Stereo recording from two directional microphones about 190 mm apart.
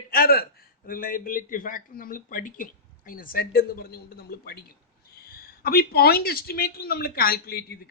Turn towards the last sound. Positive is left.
turn(degrees=50)  # may be behind; listen again after turning